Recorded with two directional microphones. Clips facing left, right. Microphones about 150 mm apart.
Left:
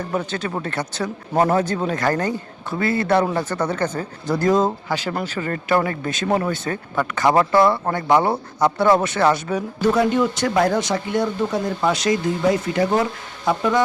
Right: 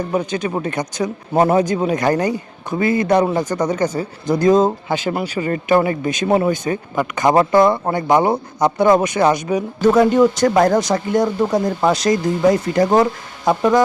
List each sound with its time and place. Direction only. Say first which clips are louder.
0.1 s a man's voice: right 4 dB; 15° right (ahead or behind)
9.8 s speech: right 6 dB; 45° right (ahead or behind)